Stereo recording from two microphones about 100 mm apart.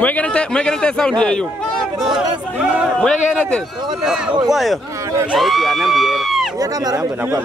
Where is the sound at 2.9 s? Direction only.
5° left (ahead or behind).